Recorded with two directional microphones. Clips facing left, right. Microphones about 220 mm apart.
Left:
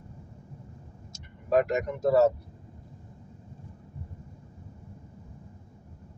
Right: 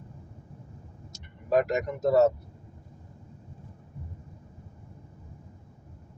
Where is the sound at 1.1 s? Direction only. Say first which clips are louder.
Even; 40° right (ahead or behind).